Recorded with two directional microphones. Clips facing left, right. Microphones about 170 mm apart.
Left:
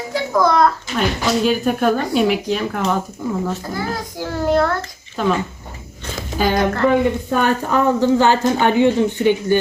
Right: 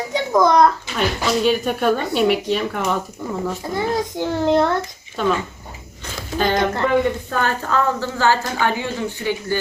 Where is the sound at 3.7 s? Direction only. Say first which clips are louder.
Right 4 dB; 20° right (ahead or behind).